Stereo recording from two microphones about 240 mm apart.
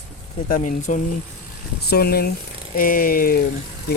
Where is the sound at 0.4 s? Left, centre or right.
Left.